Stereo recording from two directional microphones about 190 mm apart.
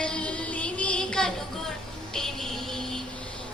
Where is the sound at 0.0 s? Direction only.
5° left (ahead or behind).